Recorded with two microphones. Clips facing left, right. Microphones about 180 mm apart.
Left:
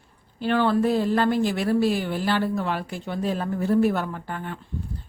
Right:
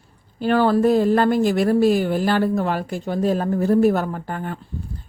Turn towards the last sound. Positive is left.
turn(degrees=-45)  # may be behind; listen again after turning